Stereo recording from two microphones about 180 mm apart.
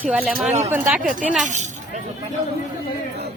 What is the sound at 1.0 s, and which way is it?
Speech, 45° right (ahead or behind).